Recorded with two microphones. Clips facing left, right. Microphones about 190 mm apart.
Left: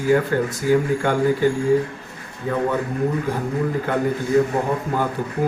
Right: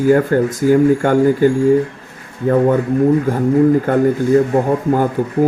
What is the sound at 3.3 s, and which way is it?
Speech, 50° right (ahead or behind).